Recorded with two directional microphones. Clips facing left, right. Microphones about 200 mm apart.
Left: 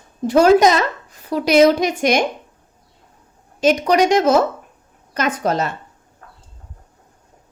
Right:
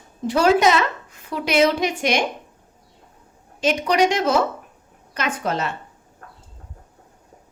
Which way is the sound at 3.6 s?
45° left (ahead or behind).